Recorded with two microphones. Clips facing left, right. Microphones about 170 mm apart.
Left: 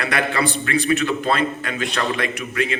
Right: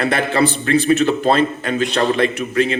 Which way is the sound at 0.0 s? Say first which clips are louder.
Right 5 dB; 30° right (ahead or behind).